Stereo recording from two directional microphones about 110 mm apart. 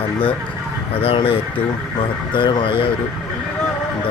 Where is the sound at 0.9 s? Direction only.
60° left (ahead or behind).